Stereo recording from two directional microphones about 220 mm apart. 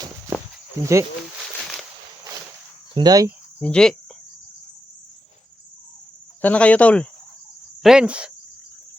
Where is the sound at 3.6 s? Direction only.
5° left (ahead or behind).